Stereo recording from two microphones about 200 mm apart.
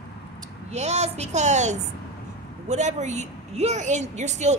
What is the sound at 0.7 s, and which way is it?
A woman's voice, 35° right (ahead or behind).